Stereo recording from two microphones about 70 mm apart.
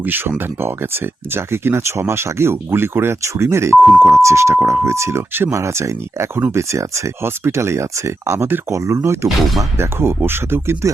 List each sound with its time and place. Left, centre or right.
0.0 s speech: right